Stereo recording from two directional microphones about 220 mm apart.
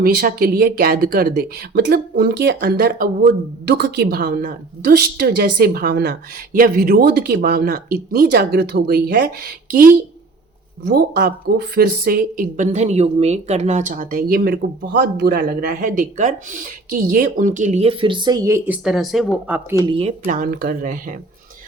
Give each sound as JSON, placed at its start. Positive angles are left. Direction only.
{"t": 0.0, "sound": "speech", "side_deg": -40}
{"t": 19.8, "sound": "speech", "side_deg": -25}